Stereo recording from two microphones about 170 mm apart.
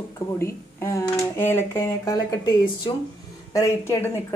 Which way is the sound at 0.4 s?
15° left (ahead or behind).